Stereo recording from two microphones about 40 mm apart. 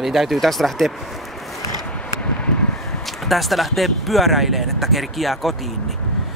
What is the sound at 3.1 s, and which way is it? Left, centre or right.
Speech, centre.